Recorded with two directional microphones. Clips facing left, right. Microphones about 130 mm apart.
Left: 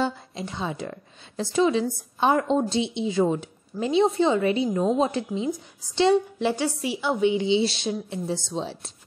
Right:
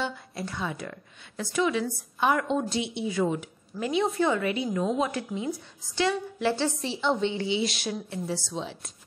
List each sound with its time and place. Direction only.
0.3 s a woman's voice: 20° left (ahead or behind)
6.4 s a woman's voice: 15° left (ahead or behind); by 8.9 s 30° left (ahead or behind)